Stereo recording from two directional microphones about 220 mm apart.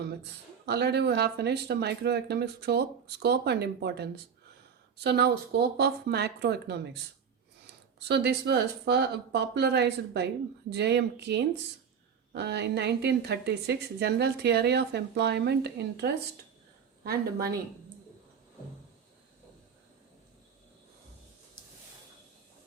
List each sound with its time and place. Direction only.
0.6 s speech: 50° right (ahead or behind)